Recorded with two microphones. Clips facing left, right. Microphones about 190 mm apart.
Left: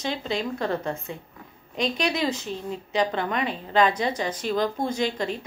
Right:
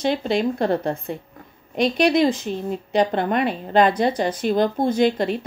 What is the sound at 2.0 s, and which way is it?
A woman's voice, 50° right (ahead or behind).